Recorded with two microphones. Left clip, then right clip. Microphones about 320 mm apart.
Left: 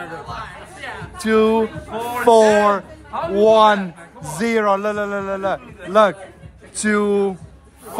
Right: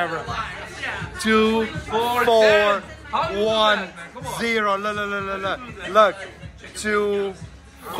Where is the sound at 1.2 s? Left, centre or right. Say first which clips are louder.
Left 3 dB; left.